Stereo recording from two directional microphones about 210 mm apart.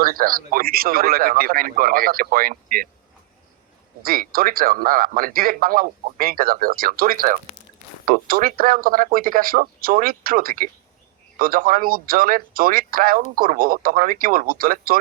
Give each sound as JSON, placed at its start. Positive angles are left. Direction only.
{"t": 0.0, "sound": "a man's voice", "side_deg": -45}
{"t": 4.0, "sound": "a man's voice", "side_deg": -45}